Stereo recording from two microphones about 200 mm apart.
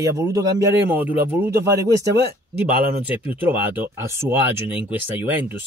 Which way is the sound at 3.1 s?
10° right (ahead or behind).